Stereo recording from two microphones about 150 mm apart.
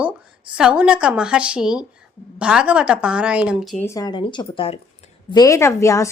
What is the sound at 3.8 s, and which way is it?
Speech, 20° left (ahead or behind).